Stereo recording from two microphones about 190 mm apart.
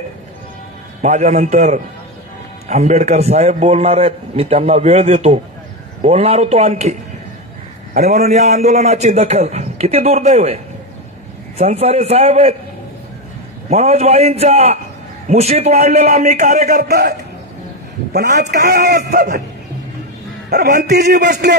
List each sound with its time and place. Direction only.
1.0 s a man's voice: 40° right (ahead or behind)
8.0 s a man's voice: 35° right (ahead or behind)
13.7 s a man's voice: 35° right (ahead or behind)
16.8 s speech: 55° right (ahead or behind)
18.6 s speech: 55° right (ahead or behind)
21.2 s speech: 60° right (ahead or behind)